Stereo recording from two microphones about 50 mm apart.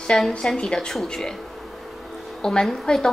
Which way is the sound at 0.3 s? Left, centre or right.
Centre.